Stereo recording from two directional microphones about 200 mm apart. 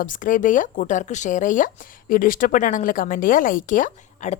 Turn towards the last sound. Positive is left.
turn(degrees=40)  # may be behind; listen again after turning